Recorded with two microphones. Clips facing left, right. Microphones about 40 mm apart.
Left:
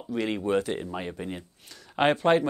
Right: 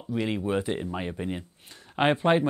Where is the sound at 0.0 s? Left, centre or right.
Centre.